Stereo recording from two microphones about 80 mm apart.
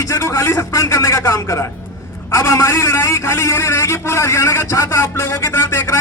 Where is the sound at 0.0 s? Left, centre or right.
Left.